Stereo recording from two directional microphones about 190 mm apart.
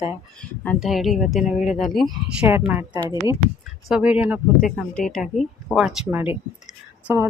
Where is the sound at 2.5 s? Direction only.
10° right (ahead or behind).